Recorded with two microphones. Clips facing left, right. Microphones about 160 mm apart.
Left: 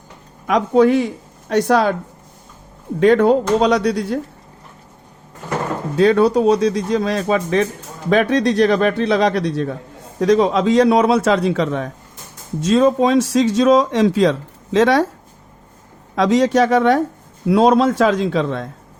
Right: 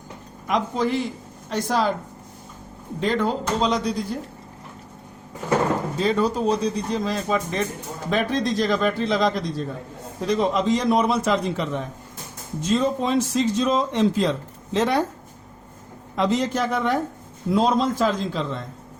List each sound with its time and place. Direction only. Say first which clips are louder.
0.7 s speech: left 10 dB; 65° left (ahead or behind)
3.0 s a man's voice: left 11 dB; 65° left (ahead or behind)
6.0 s a man's voice: left 11 dB; 75° left (ahead or behind)
10.2 s speech: left 7 dB; 85° left
16.1 s a man's voice: left 8 dB; 85° left; by 18.7 s 70° left (ahead or behind)